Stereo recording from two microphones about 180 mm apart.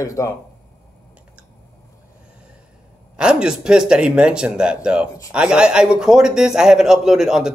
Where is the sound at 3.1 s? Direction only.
5° right (ahead or behind).